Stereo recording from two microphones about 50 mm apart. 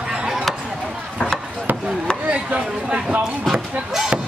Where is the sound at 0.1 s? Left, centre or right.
Centre.